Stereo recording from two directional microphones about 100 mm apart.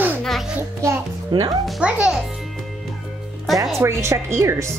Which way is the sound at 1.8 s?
10° right (ahead or behind).